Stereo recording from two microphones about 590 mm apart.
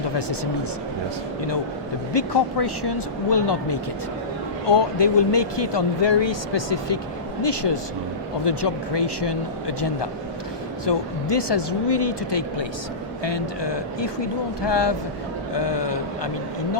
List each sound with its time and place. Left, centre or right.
2.1 s speech: left